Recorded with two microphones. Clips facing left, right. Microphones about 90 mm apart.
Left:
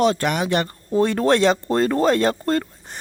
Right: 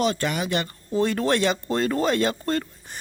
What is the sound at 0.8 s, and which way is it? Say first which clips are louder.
Speech: left 5 dB; 50° left (ahead or behind).